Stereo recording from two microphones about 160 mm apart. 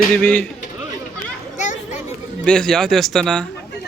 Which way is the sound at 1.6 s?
50° left (ahead or behind).